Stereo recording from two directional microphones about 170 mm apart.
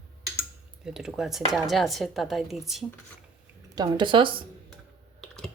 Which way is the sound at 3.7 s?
25° right (ahead or behind).